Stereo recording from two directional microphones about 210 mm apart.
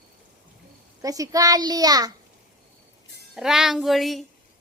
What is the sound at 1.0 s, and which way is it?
A child's voice, 15° right (ahead or behind).